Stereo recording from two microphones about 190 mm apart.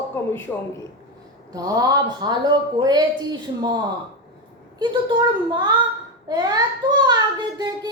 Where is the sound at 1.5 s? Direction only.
20° right (ahead or behind).